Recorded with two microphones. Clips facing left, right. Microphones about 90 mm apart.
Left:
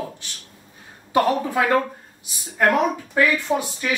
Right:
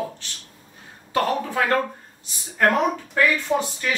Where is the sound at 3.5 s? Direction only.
10° left (ahead or behind).